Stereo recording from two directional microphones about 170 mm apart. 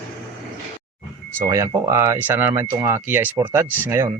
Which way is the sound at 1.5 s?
20° right (ahead or behind).